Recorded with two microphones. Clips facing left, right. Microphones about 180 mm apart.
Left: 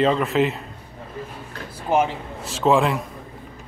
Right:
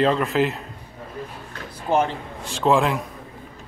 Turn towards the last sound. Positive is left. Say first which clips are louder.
# left 1 dB
turn(degrees=0)  # may be behind; listen again after turning